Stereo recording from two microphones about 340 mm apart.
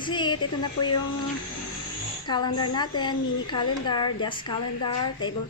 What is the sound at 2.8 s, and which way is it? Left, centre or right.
A woman's voice, centre.